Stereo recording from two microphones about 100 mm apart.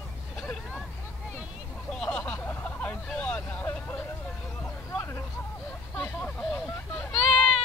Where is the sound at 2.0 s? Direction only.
15° left (ahead or behind).